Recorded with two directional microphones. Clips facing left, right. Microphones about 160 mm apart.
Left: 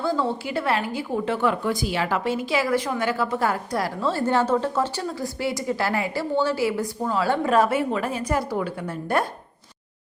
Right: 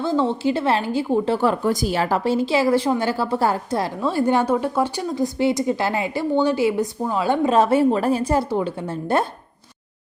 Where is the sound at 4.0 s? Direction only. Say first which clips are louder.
Right 3 dB; 15° right (ahead or behind).